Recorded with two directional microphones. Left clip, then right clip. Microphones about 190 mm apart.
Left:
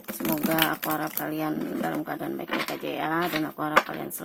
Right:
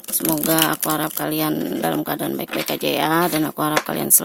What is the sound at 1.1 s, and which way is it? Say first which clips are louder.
Speech: right 7 dB; 50° right (ahead or behind).